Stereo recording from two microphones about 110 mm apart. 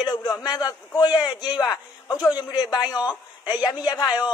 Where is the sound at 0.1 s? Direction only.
35° left (ahead or behind).